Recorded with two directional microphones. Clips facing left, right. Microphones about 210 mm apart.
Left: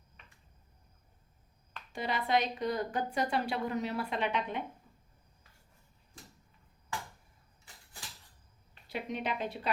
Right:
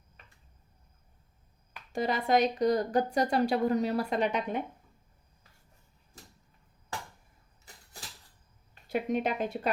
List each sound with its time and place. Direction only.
1.9 s speech: 45° right (ahead or behind)
8.9 s a woman's voice: 45° right (ahead or behind)